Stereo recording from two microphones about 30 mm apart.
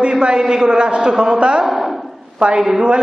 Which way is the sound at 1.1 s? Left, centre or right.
Right.